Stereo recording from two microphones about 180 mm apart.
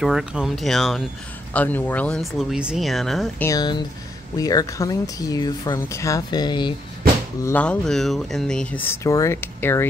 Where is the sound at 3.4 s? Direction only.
20° left (ahead or behind).